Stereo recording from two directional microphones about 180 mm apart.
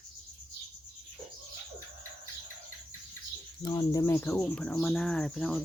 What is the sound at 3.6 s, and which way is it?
Speech, 20° left (ahead or behind).